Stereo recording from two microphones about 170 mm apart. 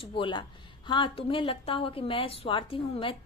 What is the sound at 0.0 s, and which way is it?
A woman's voice, 30° left (ahead or behind).